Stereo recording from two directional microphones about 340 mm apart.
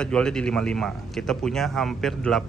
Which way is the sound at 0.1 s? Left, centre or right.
Centre.